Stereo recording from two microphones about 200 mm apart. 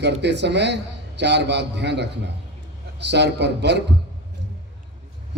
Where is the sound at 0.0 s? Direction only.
60° right (ahead or behind).